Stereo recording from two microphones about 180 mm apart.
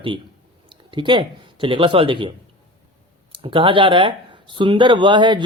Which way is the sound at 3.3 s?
30° right (ahead or behind).